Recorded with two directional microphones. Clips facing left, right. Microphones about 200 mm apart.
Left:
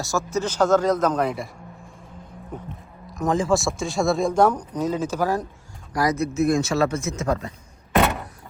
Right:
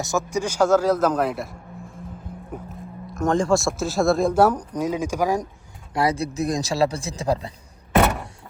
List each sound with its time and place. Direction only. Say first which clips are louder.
0.0 s a man's voice: right 1 dB; 20° right (ahead or behind)
5.9 s speech: even; 25° right (ahead or behind)
7.9 s power windows: right 1 dB; centre (ahead or behind)